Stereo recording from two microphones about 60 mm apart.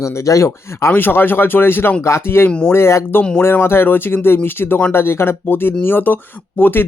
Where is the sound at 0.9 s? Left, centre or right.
Left.